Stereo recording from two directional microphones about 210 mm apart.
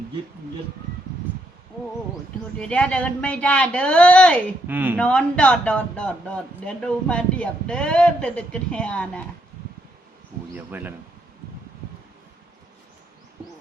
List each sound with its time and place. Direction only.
2.6 s speech: 5° left (ahead or behind)
4.6 s speech: 10° right (ahead or behind)
4.9 s speech: 5° left (ahead or behind)
10.5 s speech: 10° right (ahead or behind)